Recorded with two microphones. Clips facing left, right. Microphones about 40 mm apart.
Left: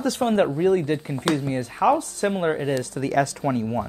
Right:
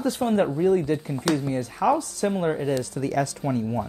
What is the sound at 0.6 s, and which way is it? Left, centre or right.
Speech, left.